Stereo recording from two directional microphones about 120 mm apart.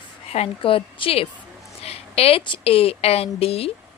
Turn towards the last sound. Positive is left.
turn(degrees=55)  # may be behind; listen again after turning